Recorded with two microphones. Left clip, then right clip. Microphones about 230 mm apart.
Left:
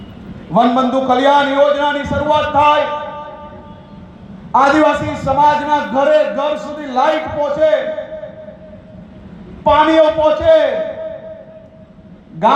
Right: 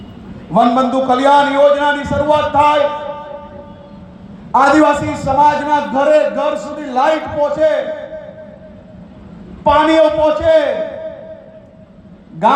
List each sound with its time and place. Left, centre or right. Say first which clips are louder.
0.5 s a man's voice: right 1 dB; right
4.5 s a man's voice: right 1 dB; right
9.6 s a man's voice: even; right
12.4 s a man's voice: even; right